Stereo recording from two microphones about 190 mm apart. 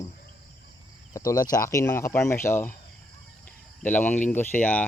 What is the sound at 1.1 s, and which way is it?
Speech, 15° left (ahead or behind).